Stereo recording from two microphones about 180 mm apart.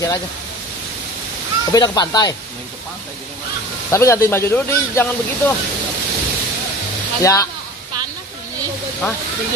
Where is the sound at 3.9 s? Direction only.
15° left (ahead or behind).